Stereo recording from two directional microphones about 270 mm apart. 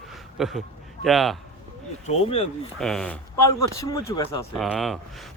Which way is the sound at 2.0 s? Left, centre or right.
Left.